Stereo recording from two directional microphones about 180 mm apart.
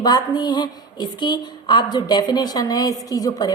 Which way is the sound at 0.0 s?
20° left (ahead or behind).